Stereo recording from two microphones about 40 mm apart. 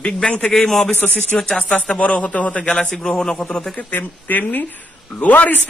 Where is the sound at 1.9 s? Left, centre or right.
Left.